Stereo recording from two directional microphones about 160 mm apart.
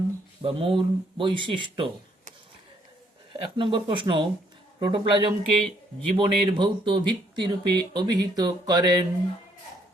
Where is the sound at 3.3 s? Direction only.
30° right (ahead or behind).